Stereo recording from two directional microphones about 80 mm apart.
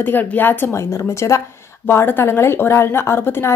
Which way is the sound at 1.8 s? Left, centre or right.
Left.